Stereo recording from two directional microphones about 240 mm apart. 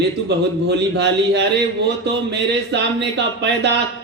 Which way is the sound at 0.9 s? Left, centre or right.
Right.